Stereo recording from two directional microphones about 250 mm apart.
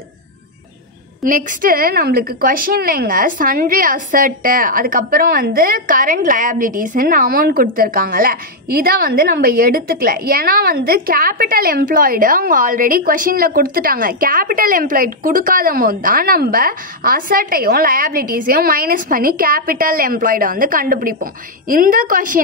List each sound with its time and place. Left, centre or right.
1.2 s a woman's voice: right